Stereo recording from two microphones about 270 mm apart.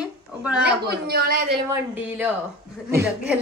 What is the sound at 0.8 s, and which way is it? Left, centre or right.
Speech, right.